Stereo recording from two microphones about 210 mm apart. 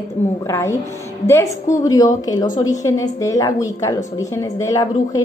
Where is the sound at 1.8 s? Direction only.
15° left (ahead or behind).